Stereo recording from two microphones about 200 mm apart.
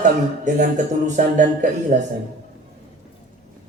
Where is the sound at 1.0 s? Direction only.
40° right (ahead or behind).